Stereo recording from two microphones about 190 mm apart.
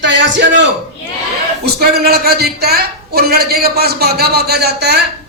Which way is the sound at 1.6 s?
55° right (ahead or behind).